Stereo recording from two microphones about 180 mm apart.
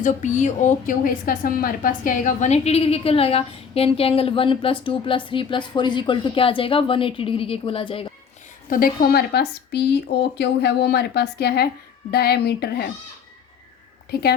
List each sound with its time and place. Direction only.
0.0 s a woman's voice: 40° left (ahead or behind)
8.7 s a woman's voice: 55° left (ahead or behind)
14.1 s a woman's voice: 60° left (ahead or behind)